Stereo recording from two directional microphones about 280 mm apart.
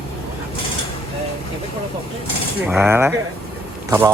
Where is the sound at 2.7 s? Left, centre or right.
Centre.